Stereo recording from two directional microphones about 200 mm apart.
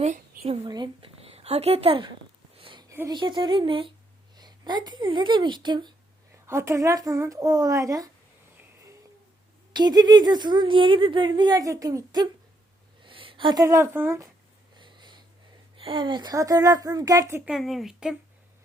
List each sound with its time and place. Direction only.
0.0 s a woman's voice: 35° right (ahead or behind)
2.6 s a sound: 25° right (ahead or behind)
2.9 s a woman's voice: 10° right (ahead or behind)
3.2 s a woman's voice: 25° right (ahead or behind)
9.7 s a woman's voice: 20° right (ahead or behind)
14.8 s wheeze: 25° right (ahead or behind)
15.7 s a woman's voice: 25° right (ahead or behind)
17.5 s speech: centre (ahead or behind)